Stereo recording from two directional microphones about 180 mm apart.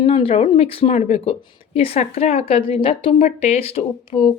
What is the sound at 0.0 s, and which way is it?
A woman's voice, 30° left (ahead or behind).